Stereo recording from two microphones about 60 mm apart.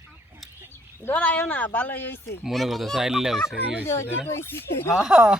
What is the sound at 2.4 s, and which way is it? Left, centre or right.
Speech, centre.